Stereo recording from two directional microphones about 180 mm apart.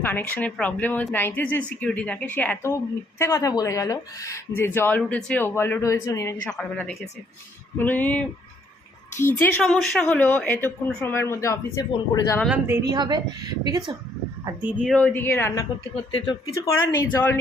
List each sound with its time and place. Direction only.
0.0 s speech: 10° left (ahead or behind)
6.6 s speech: 5° left (ahead or behind)
12.5 s speech: 10° right (ahead or behind)
12.9 s speech: 25° right (ahead or behind)
14.4 s speech: 10° right (ahead or behind)
14.9 s speech: 10° left (ahead or behind)
16.1 s speech: 25° left (ahead or behind)
17.0 s speech: 10° left (ahead or behind)